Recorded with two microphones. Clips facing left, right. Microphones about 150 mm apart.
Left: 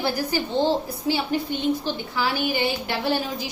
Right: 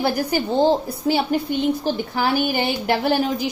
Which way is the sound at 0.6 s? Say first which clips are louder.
Right 6 dB; 45° right (ahead or behind).